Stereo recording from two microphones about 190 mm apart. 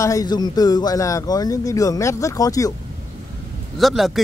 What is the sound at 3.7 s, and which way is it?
Speech, centre (ahead or behind).